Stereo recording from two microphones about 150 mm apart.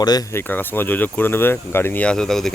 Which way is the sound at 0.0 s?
25° left (ahead or behind).